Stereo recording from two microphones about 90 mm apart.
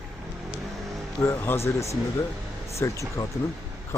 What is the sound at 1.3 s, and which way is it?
Speech, 25° left (ahead or behind).